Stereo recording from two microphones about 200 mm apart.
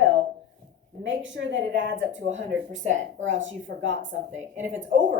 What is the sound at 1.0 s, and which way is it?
Speech, 70° right (ahead or behind).